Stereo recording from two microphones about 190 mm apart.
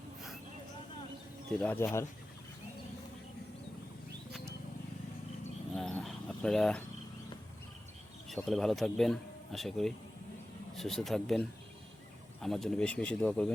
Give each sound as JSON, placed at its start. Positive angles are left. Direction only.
{"t": 1.5, "sound": "speech", "side_deg": 10}
{"t": 4.3, "sound": "wild animals", "side_deg": 0}
{"t": 5.7, "sound": "dog", "side_deg": 5}
{"t": 8.4, "sound": "speech", "side_deg": 0}